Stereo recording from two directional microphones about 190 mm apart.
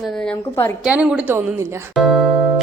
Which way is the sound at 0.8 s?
5° right (ahead or behind).